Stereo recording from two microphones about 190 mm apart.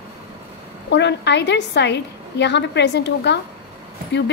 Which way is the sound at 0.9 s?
65° left (ahead or behind).